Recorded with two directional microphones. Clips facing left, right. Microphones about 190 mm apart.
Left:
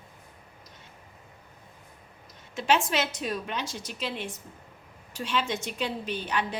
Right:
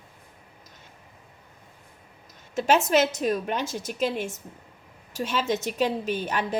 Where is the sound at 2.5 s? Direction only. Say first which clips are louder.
Right 5 dB; 45° right (ahead or behind).